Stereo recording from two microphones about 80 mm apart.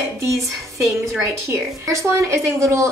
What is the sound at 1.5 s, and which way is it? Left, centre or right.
A woman's voice, right.